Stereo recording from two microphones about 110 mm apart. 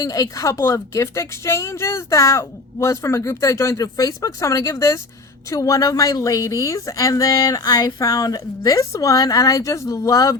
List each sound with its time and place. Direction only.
0.0 s a woman's voice: 30° left (ahead or behind)